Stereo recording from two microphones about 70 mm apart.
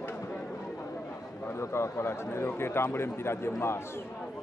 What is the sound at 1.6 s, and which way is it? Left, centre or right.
A man's voice, left.